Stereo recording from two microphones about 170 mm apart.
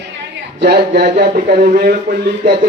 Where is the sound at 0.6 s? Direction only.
70° right (ahead or behind).